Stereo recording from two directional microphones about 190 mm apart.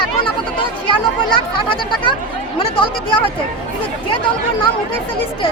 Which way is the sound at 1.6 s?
25° left (ahead or behind).